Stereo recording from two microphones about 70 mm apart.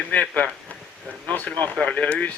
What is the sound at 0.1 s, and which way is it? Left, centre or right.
Speech, centre.